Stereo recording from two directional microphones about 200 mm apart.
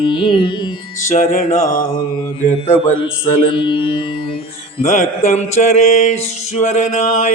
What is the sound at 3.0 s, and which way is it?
Carnatic music, 25° left (ahead or behind).